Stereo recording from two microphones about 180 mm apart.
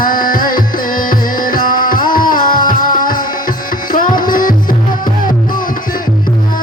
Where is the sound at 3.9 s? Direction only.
50° left (ahead or behind).